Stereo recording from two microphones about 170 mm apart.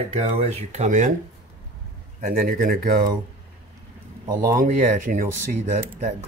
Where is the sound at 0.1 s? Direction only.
40° right (ahead or behind).